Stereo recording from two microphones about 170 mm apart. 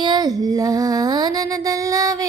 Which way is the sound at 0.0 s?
25° right (ahead or behind).